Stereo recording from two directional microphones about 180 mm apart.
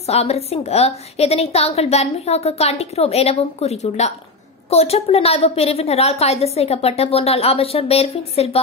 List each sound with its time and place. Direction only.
0.0 s a woman's voice: 35° left (ahead or behind)